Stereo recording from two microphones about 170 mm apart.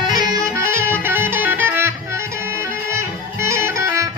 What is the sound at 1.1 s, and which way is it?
Music, 10° right (ahead or behind).